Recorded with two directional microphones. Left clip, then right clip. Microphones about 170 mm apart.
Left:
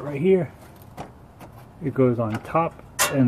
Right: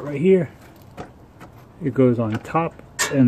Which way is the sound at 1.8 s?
50° right (ahead or behind).